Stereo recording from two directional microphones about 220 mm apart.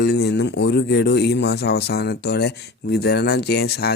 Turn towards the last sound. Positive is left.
turn(degrees=45)  # may be behind; listen again after turning